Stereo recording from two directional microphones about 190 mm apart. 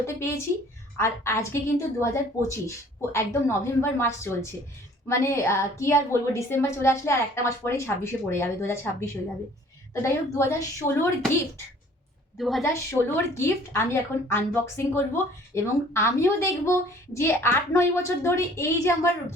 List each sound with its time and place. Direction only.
0.0 s a woman's voice: 15° left (ahead or behind)
12.4 s a woman's voice: centre (ahead or behind)
13.3 s a woman's voice: 15° left (ahead or behind)